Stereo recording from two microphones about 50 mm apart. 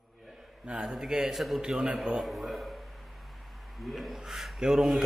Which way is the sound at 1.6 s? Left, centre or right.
Centre.